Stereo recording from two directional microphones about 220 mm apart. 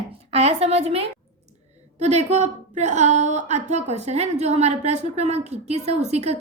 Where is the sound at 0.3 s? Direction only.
30° right (ahead or behind).